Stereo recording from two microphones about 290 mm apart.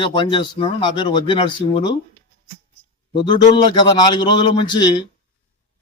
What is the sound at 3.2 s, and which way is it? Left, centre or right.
A man's voice, centre.